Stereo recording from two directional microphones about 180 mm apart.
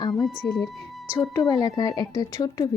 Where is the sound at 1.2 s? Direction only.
20° left (ahead or behind).